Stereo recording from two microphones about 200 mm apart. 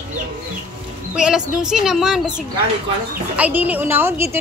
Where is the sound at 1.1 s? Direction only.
5° right (ahead or behind).